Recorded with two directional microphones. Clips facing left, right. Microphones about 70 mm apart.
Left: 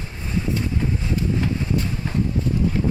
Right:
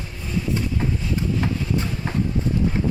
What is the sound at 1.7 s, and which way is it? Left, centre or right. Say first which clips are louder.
Vehicle: even; right.